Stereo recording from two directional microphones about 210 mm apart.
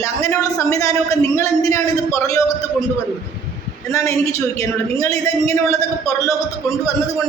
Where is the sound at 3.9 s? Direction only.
15° left (ahead or behind).